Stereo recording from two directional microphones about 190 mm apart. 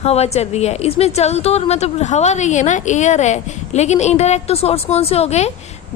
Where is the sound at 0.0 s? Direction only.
35° left (ahead or behind).